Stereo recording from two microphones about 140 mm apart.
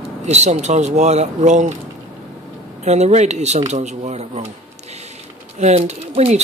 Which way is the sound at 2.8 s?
55° right (ahead or behind).